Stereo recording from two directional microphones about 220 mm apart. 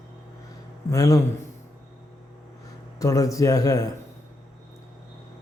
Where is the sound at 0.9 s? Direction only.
15° left (ahead or behind).